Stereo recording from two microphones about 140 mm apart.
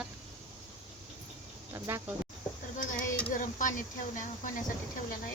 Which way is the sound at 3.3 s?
65° left (ahead or behind).